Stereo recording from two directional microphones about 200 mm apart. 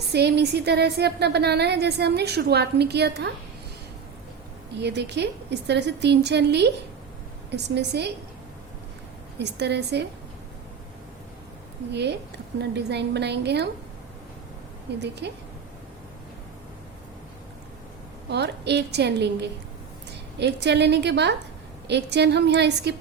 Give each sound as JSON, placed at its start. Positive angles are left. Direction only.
{"t": 0.1, "sound": "a woman's voice", "side_deg": -55}
{"t": 4.8, "sound": "a woman's voice", "side_deg": -60}
{"t": 9.4, "sound": "a woman's voice", "side_deg": -55}
{"t": 11.9, "sound": "a woman's voice", "side_deg": -55}
{"t": 15.0, "sound": "a woman's voice", "side_deg": -55}
{"t": 18.3, "sound": "a woman's voice", "side_deg": -55}